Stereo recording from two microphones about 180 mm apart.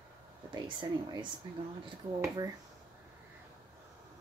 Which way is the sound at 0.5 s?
25° right (ahead or behind).